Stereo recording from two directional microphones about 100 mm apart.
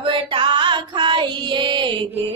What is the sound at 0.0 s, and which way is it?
Music, 55° right (ahead or behind).